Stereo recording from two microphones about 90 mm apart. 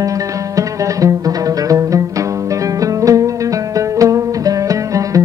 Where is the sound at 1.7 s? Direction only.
40° right (ahead or behind).